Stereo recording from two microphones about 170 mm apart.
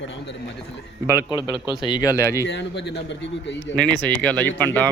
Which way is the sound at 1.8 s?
25° left (ahead or behind).